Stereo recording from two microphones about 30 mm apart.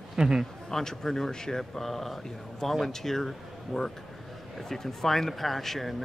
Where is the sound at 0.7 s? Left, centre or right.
Centre.